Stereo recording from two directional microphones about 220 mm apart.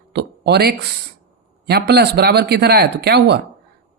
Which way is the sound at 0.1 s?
50° right (ahead or behind).